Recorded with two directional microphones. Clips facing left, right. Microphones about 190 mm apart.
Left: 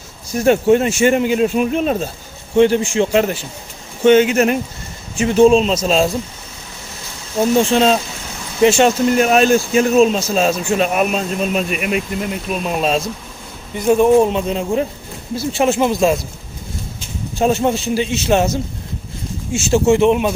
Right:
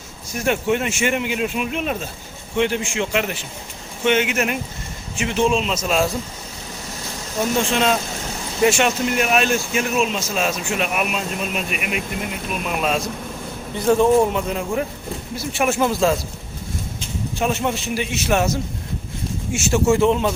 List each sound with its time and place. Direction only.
0.3 s speech: 35° left (ahead or behind)
7.7 s a man's voice: 35° left (ahead or behind)
13.7 s a man's voice: 15° left (ahead or behind)
17.4 s a man's voice: 35° left (ahead or behind)
19.5 s a man's voice: 30° left (ahead or behind)